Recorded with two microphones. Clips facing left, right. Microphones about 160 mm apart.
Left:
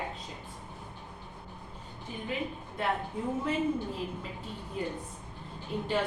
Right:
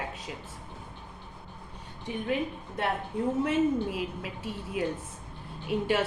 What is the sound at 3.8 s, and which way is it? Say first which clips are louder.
A woman's voice: right 3 dB; 85° right.